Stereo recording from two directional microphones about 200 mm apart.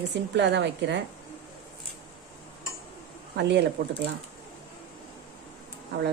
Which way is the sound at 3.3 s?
60° right (ahead or behind).